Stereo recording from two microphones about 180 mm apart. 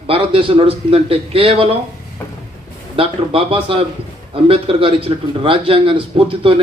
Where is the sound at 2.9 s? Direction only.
30° right (ahead or behind).